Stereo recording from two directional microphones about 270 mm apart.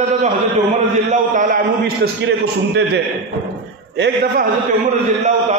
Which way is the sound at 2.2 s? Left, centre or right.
Right.